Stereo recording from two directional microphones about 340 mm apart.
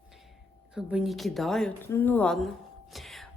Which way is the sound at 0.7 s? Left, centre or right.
Centre.